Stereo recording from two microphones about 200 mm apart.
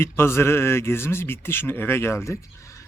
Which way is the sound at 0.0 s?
10° left (ahead or behind).